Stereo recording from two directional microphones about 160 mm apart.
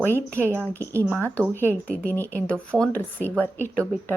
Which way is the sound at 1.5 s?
15° left (ahead or behind).